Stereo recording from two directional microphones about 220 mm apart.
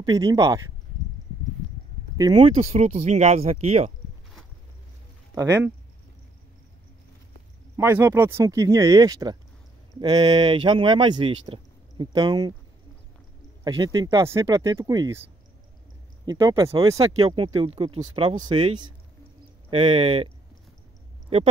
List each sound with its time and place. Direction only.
0.0 s speech: 15° right (ahead or behind)
2.1 s speech: 20° right (ahead or behind)
5.3 s speech: 15° right (ahead or behind)
7.7 s speech: 10° right (ahead or behind)
13.7 s speech: 15° right (ahead or behind)
16.3 s speech: 20° right (ahead or behind)
19.7 s speech: 25° right (ahead or behind)